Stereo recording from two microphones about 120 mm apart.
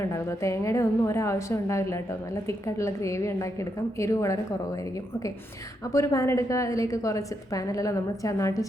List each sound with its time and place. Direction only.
0.0 s a woman's voice: 25° left (ahead or behind)